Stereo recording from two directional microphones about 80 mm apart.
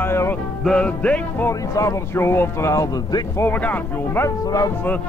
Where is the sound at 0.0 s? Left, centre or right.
Left.